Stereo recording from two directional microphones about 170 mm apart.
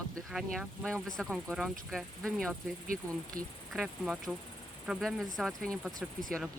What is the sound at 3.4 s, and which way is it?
Speech, 55° right (ahead or behind).